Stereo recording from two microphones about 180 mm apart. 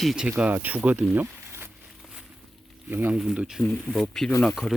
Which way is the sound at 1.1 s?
10° right (ahead or behind).